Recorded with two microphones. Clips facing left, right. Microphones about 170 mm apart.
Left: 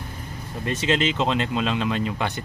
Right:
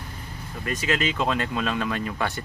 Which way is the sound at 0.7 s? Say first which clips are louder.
Left 3 dB; 25° left (ahead or behind).